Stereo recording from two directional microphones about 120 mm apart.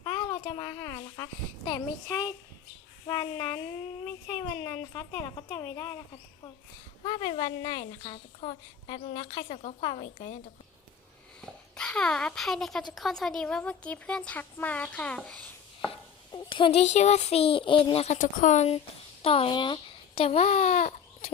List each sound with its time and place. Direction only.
0.0 s a sound: 30° left (ahead or behind)
3.1 s speech: 35° left (ahead or behind)
7.0 s a woman's voice: 40° left (ahead or behind); by 9.7 s 60° left (ahead or behind)
9.8 s a woman's voice: 50° left (ahead or behind)
11.3 s speech: 5° left (ahead or behind)
15.9 s speech: 45° left (ahead or behind)
16.8 s a child's voice: 70° left (ahead or behind)
19.2 s speech: 50° left (ahead or behind); by 20.9 s 65° left (ahead or behind)